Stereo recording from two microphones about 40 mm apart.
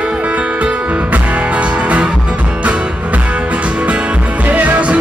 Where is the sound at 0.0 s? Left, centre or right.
Right.